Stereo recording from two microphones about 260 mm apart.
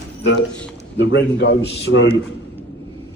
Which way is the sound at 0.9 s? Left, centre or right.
Left.